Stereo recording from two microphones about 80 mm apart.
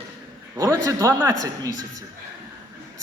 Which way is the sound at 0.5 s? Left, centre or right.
Right.